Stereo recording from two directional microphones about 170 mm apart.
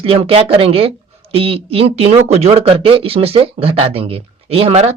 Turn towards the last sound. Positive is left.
turn(degrees=-35)  # may be behind; listen again after turning